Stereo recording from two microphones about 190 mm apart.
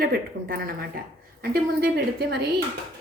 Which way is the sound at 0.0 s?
50° right (ahead or behind).